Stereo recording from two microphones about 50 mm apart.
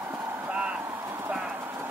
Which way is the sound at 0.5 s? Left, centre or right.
Right.